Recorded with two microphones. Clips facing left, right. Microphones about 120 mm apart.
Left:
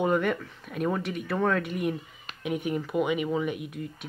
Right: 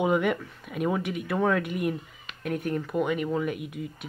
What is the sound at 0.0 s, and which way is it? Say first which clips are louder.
Speech: right 1 dB; 10° right (ahead or behind).